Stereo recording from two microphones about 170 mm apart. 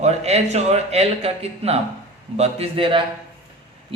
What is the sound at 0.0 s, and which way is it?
A man's voice, 40° right (ahead or behind).